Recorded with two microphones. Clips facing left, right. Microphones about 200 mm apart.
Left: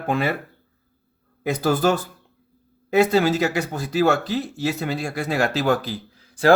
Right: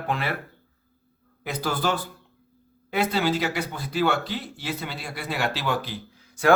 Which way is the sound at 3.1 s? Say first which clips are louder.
Left 5 dB; 45° left (ahead or behind).